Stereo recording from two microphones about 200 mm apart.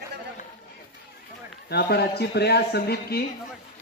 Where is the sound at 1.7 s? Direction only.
55° left (ahead or behind).